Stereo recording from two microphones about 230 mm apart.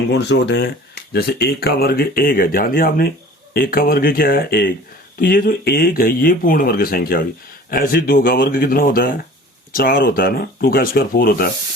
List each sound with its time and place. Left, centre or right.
0.1 s speech: left